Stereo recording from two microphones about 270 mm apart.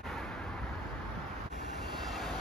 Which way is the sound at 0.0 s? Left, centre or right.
Centre.